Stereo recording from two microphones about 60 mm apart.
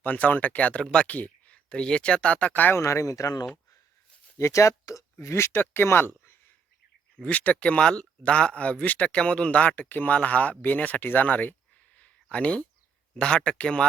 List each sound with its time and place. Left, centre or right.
0.0 s speech: left
2.7 s speech: left
4.4 s speech: left
5.2 s speech: left
6.2 s a sound: left
7.2 s speech: left
11.9 s a sound: left
13.1 s speech: centre